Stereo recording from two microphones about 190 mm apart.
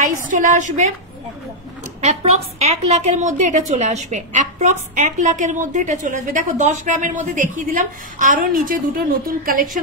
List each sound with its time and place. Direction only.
0.0 s a woman's voice: 40° right (ahead or behind)
2.6 s a woman's voice: 35° right (ahead or behind)